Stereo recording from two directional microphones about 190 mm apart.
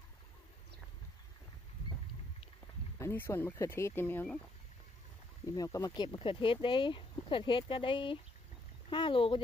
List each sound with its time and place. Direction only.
3.0 s speech: 10° left (ahead or behind)
5.6 s speech: 20° left (ahead or behind)